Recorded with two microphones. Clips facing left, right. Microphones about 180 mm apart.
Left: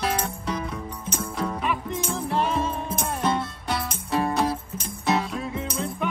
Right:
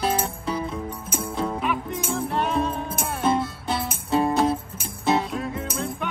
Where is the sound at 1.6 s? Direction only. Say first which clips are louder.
Right 1 dB; 5° right (ahead or behind).